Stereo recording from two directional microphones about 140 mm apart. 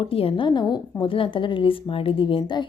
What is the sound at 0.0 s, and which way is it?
Speech, 40° left (ahead or behind).